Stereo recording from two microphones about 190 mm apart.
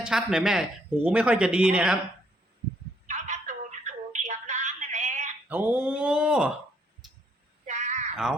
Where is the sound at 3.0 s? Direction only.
40° right (ahead or behind).